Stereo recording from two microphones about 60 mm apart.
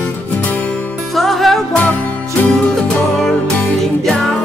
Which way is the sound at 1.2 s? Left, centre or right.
Centre.